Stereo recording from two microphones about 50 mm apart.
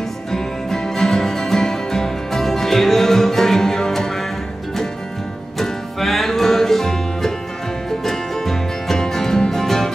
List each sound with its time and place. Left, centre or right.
0.3 s music: centre
5.6 s music: centre